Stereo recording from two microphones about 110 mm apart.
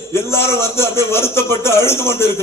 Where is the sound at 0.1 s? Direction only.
25° left (ahead or behind).